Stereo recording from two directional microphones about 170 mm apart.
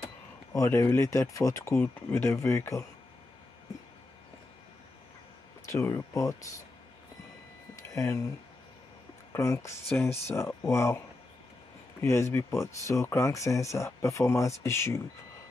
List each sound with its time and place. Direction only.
0.5 s speech: 15° left (ahead or behind)
5.7 s speech: 15° left (ahead or behind)
7.9 s speech: 15° left (ahead or behind)
9.3 s speech: 20° left (ahead or behind)
12.0 s speech: 15° left (ahead or behind)